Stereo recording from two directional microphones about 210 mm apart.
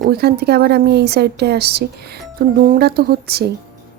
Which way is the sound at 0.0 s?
50° right (ahead or behind).